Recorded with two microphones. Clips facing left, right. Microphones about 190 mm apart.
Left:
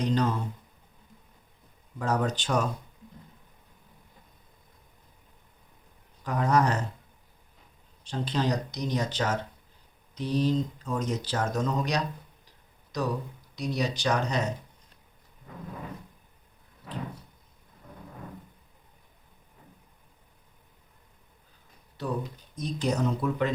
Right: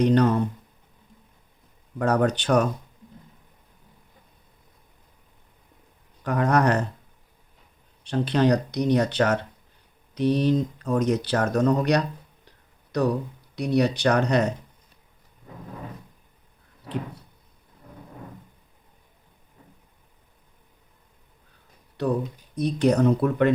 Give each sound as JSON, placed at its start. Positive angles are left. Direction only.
{"t": 0.0, "sound": "speech", "side_deg": -65}
{"t": 2.0, "sound": "speech", "side_deg": -65}
{"t": 6.2, "sound": "speech", "side_deg": -65}
{"t": 8.0, "sound": "speech", "side_deg": -65}
{"t": 12.5, "sound": "a sound", "side_deg": -60}
{"t": 13.6, "sound": "speech", "side_deg": -60}
{"t": 22.0, "sound": "speech", "side_deg": -65}